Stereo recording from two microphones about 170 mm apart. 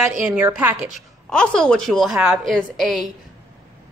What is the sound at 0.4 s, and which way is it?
Speech, 10° right (ahead or behind).